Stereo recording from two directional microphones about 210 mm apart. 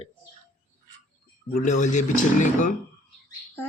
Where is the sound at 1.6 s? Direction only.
35° left (ahead or behind).